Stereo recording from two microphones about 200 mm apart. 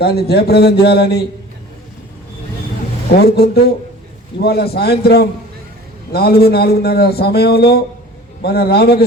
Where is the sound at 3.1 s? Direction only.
55° left (ahead or behind).